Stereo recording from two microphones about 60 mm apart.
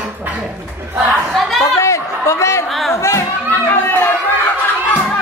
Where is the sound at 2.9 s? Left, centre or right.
Left.